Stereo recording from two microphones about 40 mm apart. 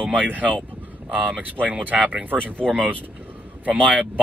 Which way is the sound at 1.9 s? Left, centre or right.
Right.